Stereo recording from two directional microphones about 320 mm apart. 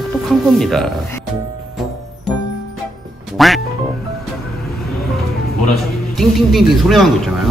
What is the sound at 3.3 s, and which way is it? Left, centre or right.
Music, centre.